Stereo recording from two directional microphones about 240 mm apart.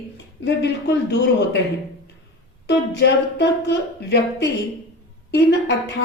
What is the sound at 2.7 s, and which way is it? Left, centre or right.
A woman's voice, left.